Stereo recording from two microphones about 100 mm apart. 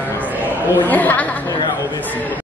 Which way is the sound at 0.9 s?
15° left (ahead or behind).